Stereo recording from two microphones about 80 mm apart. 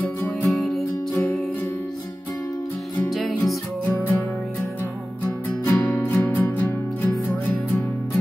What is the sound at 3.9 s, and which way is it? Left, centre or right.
Music, left.